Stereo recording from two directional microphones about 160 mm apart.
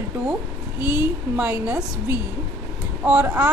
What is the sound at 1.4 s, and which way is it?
Speech, 10° right (ahead or behind).